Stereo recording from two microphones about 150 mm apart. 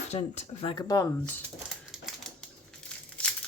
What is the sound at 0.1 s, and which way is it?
Speech, 45° left (ahead or behind).